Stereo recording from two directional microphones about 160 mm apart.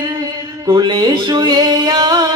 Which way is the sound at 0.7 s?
30° right (ahead or behind).